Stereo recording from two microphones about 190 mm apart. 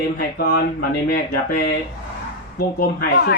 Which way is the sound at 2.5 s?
50° left (ahead or behind).